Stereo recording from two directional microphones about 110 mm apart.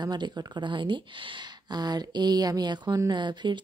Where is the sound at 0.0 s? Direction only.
40° right (ahead or behind).